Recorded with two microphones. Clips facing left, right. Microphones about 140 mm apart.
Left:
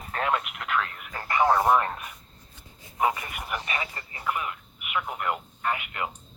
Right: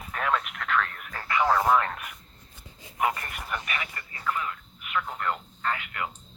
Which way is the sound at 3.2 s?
5° left (ahead or behind).